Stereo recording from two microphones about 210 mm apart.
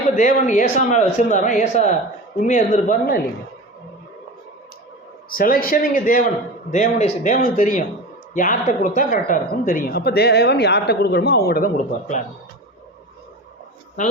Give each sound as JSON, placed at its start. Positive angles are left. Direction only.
{"t": 0.2, "sound": "a man's voice", "side_deg": 35}
{"t": 5.3, "sound": "a man's voice", "side_deg": 45}
{"t": 14.0, "sound": "speech", "side_deg": 35}